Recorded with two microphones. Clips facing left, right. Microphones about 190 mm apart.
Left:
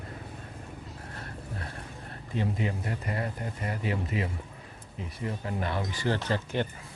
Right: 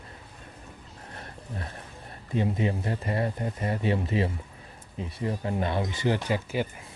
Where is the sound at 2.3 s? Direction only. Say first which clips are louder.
Right 4 dB; 20° right (ahead or behind).